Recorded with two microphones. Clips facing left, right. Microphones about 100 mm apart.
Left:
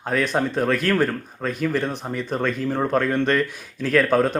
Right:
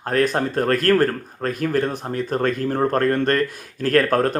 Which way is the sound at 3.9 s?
Centre (ahead or behind).